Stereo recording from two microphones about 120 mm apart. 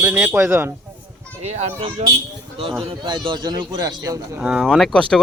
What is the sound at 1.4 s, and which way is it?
Speech, 70° right (ahead or behind).